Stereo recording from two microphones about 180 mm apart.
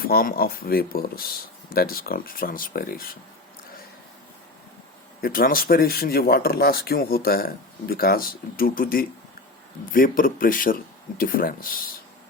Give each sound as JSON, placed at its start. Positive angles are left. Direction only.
{"t": 0.0, "sound": "speech", "side_deg": 55}
{"t": 5.2, "sound": "speech", "side_deg": 55}